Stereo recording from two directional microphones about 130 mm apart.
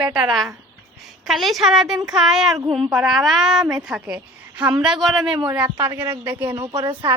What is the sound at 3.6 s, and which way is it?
Speech, 25° right (ahead or behind).